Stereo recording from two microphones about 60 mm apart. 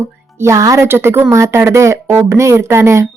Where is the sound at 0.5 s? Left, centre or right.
Right.